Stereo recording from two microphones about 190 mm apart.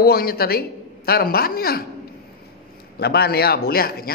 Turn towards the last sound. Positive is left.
turn(degrees=50)  # may be behind; listen again after turning